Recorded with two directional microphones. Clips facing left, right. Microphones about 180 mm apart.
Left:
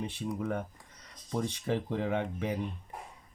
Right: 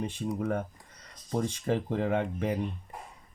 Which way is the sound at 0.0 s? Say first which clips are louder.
Right 3 dB; 45° right (ahead or behind).